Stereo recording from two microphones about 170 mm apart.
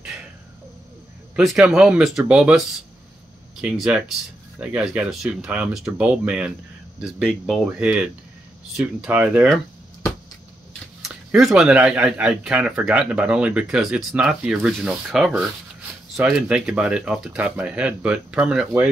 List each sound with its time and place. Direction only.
1.3 s speech: 5° right (ahead or behind)
3.6 s speech: 5° right (ahead or behind)
10.7 s speech: centre (ahead or behind)